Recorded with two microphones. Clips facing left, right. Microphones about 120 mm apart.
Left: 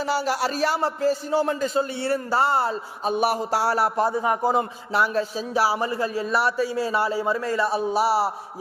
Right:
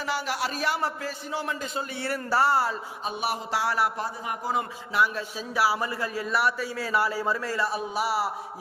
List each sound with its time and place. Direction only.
0.0 s a man's voice: 35° left (ahead or behind)
3.1 s a man's voice: 40° left (ahead or behind)